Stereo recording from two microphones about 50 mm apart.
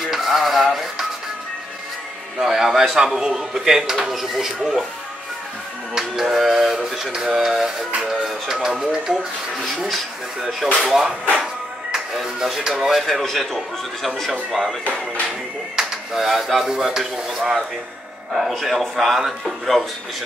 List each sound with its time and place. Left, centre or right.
0.0 s music: centre
2.4 s a man's voice: centre
5.9 s speech: centre
15.8 s speech: centre